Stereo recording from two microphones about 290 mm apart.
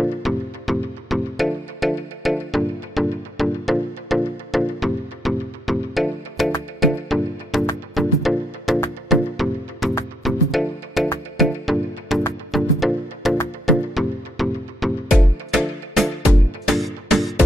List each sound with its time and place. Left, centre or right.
0.0 s music: centre